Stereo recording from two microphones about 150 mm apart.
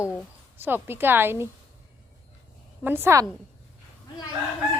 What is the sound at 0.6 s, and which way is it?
Speech, 15° right (ahead or behind).